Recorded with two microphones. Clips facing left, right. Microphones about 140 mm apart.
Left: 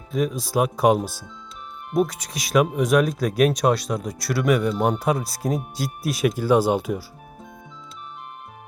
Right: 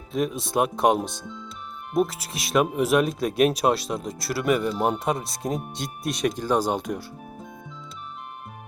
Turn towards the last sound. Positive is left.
turn(degrees=5)  # may be behind; listen again after turning